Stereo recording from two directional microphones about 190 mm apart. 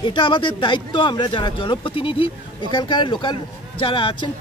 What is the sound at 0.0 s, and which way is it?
Speech, 25° left (ahead or behind).